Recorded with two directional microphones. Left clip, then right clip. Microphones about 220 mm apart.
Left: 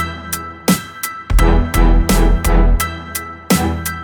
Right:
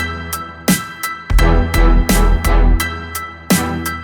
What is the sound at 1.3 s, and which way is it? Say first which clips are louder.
Music: even; centre (ahead or behind).